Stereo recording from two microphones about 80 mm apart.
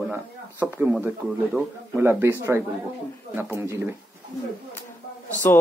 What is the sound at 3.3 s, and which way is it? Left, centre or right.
Speech, right.